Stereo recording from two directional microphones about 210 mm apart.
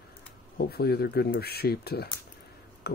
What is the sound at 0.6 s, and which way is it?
Speech, 50° left (ahead or behind).